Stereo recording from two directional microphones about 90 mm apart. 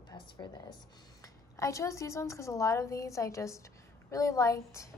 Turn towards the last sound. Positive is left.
turn(degrees=35)  # may be behind; listen again after turning